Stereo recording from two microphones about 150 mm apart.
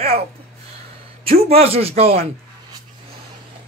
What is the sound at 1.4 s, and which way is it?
Speech, 40° right (ahead or behind).